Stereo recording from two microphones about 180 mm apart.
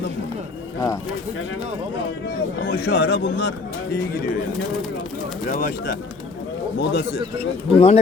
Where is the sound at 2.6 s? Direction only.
60° left (ahead or behind).